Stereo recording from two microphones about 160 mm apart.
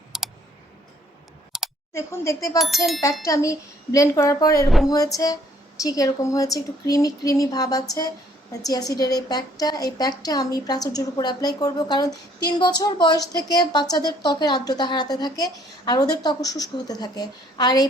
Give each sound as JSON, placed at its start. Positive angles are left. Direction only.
{"t": 0.1, "sound": "clicking", "side_deg": 0}
{"t": 1.5, "sound": "computer keyboard", "side_deg": 0}
{"t": 1.9, "sound": "a woman's voice", "side_deg": 20}
{"t": 2.6, "sound": "speech", "side_deg": 0}
{"t": 3.2, "sound": "a woman's voice", "side_deg": 20}